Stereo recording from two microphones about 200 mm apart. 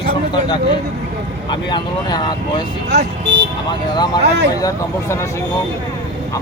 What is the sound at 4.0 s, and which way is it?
Speech, 20° left (ahead or behind).